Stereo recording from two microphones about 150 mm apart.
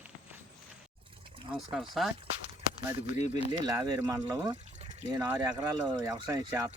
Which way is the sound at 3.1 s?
50° left (ahead or behind).